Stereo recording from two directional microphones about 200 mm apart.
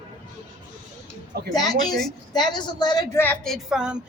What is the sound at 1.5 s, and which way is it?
A woman's voice, 20° left (ahead or behind).